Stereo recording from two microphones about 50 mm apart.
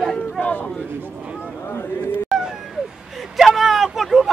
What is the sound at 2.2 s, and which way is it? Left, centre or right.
Cat, centre.